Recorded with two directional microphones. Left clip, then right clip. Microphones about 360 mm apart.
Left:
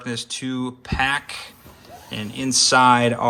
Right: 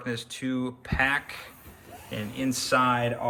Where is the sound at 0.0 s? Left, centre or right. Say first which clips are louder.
Left 5 dB; centre.